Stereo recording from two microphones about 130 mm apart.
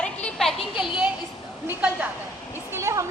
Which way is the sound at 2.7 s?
20° right (ahead or behind).